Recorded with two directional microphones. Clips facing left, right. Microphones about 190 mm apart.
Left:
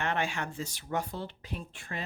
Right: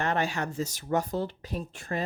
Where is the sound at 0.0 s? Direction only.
40° right (ahead or behind).